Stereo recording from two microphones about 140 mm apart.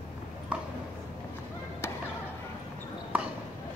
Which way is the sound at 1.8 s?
15° left (ahead or behind).